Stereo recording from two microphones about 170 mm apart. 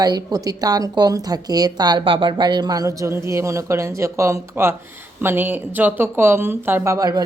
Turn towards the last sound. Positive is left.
turn(degrees=-20)  # may be behind; listen again after turning